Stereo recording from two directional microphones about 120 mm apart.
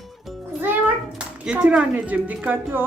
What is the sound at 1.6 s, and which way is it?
A woman's voice, 10° right (ahead or behind).